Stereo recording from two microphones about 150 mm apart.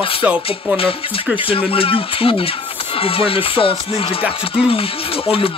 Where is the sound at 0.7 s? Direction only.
40° left (ahead or behind).